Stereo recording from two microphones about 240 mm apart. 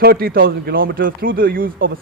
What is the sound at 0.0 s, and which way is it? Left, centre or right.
Speech, right.